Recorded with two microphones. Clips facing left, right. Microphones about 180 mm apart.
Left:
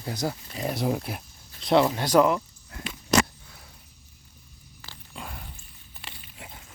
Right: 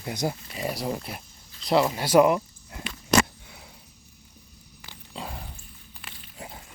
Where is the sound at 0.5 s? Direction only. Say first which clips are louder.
Left 2 dB; centre (ahead or behind); by 2.7 s 15° right (ahead or behind).